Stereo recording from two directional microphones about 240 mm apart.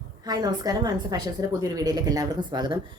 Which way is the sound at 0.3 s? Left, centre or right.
Centre.